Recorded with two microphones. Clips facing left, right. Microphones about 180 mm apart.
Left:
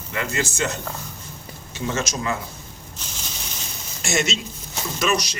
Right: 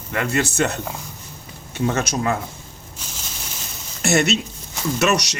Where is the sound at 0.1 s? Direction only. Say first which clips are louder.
Right 4 dB; 60° right (ahead or behind).